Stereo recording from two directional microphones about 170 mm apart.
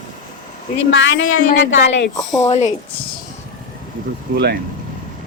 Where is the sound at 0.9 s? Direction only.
90° left.